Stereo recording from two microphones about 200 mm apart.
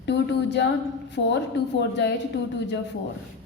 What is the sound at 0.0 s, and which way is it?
Speech, 60° left (ahead or behind).